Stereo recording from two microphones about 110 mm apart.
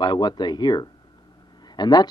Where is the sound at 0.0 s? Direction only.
40° left (ahead or behind).